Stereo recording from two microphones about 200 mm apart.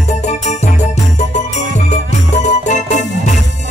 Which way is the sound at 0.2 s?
35° left (ahead or behind).